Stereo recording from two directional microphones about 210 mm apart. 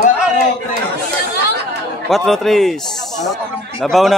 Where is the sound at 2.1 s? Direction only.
Centre (ahead or behind).